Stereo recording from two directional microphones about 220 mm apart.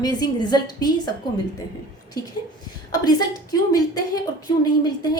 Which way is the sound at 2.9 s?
15° left (ahead or behind).